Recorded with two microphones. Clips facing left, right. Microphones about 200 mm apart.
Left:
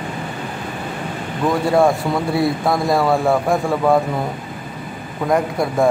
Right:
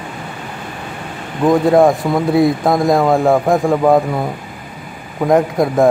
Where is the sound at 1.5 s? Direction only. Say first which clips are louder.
Right 5 dB; 20° right (ahead or behind).